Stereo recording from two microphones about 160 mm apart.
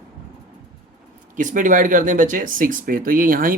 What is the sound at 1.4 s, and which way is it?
Speech, 55° right (ahead or behind).